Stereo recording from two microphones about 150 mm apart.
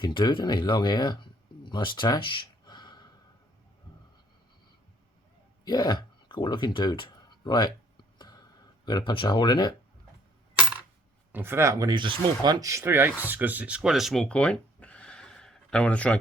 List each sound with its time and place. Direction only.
0.0 s speech: 30° left (ahead or behind)
5.6 s speech: 25° left (ahead or behind)
8.8 s speech: 30° left (ahead or behind)
11.3 s speech: 15° right (ahead or behind); by 16.1 s 10° left (ahead or behind)